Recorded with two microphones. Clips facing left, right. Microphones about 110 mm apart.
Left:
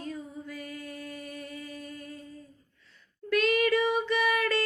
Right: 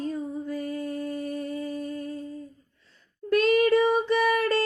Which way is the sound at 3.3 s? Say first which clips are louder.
Right 5 dB; 35° right (ahead or behind).